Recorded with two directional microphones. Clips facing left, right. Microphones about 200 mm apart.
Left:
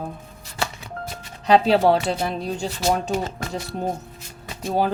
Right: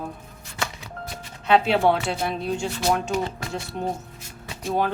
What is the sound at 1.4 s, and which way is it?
Speech, 35° left (ahead or behind).